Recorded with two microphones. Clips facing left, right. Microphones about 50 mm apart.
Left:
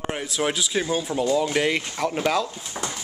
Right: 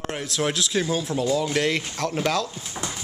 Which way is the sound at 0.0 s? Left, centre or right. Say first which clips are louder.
Left 1 dB; centre.